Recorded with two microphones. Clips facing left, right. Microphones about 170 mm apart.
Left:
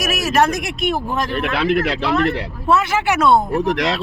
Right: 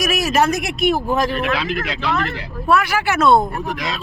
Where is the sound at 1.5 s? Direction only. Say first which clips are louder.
Left 6 dB; 60° left (ahead or behind).